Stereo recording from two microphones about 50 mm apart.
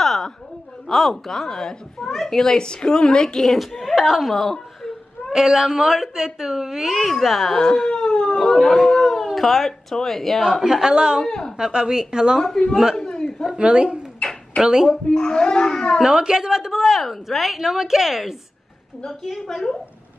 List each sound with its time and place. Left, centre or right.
0.0 s a sound: centre
0.8 s speech: centre
5.3 s speech: centre
7.6 s howl: centre
8.6 s speech: centre
10.6 s speech: centre
11.2 s speech: centre
11.5 s speech: centre
12.6 s speech: centre
12.9 s a sound: centre
13.6 s speech: centre
15.0 s speech: centre
16.0 s speech: centre
19.2 s speech: centre